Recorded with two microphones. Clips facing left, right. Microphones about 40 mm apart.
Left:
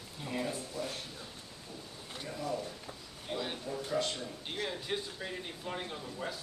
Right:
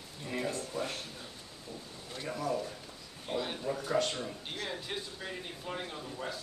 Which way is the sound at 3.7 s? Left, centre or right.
Right.